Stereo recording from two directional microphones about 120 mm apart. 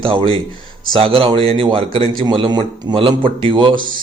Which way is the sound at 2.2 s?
40° right (ahead or behind).